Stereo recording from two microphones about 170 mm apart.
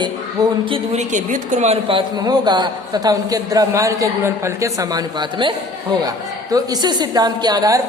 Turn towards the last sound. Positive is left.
turn(degrees=-20)  # may be behind; listen again after turning